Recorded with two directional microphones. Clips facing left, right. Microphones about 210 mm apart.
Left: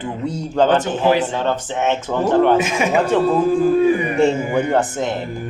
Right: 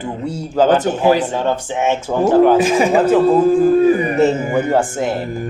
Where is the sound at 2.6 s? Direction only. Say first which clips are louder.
Right 5 dB; 35° right (ahead or behind).